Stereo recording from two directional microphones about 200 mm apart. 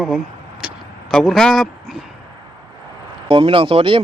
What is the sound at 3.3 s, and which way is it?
Speech, 25° right (ahead or behind).